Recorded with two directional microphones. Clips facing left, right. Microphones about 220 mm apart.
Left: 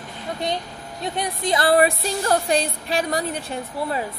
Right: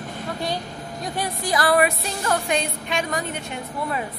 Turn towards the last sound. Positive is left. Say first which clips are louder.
# left 2 dB
turn(degrees=35)  # may be behind; listen again after turning